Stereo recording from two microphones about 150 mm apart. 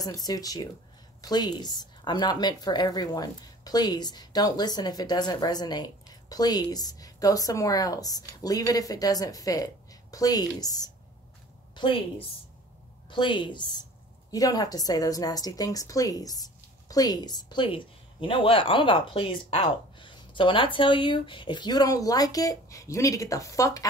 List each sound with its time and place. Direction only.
0.0 s a woman's voice: 25° left (ahead or behind)
11.7 s a sound: 35° left (ahead or behind)
13.1 s a woman's voice: 30° left (ahead or behind)